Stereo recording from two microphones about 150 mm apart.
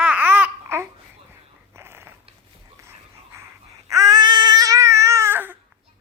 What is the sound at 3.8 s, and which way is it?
Babbling, 20° right (ahead or behind).